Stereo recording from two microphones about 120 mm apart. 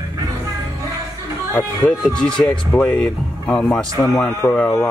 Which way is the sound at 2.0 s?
5° left (ahead or behind).